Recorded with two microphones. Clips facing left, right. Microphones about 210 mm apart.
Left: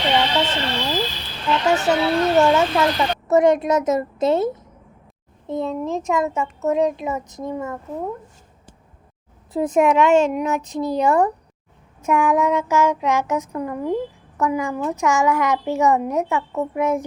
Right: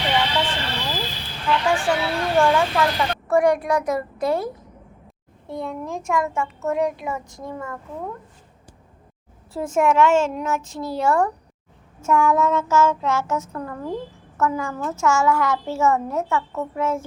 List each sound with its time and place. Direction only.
0.4 s speech: 25° left (ahead or behind)
9.5 s a child's voice: 20° left (ahead or behind)